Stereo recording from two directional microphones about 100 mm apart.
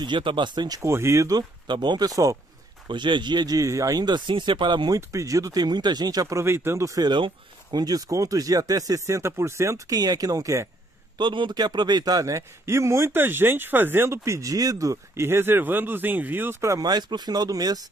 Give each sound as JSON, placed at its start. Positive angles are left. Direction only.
{"t": 0.0, "sound": "speech", "side_deg": -55}
{"t": 0.8, "sound": "a man's voice", "side_deg": -30}
{"t": 1.7, "sound": "speech", "side_deg": -50}
{"t": 2.9, "sound": "speech", "side_deg": -50}
{"t": 4.9, "sound": "speech", "side_deg": -35}
{"t": 7.1, "sound": "speech", "side_deg": -50}
{"t": 7.8, "sound": "speech", "side_deg": -40}
{"t": 11.1, "sound": "a man's voice", "side_deg": -50}
{"t": 16.7, "sound": "speech", "side_deg": -40}